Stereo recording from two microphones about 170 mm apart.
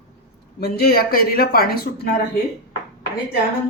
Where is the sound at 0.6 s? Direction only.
65° left (ahead or behind).